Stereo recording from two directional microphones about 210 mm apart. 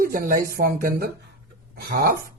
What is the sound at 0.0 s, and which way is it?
A woman's voice, 45° right (ahead or behind).